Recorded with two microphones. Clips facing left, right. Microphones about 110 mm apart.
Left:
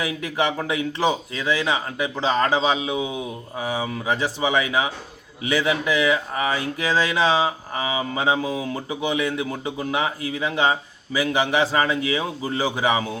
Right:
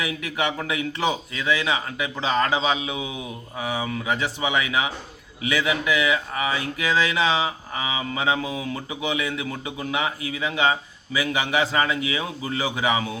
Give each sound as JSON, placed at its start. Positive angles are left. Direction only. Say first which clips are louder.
{"t": 0.7, "sound": "a man's voice", "louder": "left 3 dB", "side_deg": 35}